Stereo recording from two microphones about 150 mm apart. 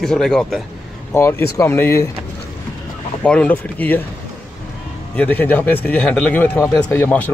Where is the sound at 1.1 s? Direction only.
15° left (ahead or behind).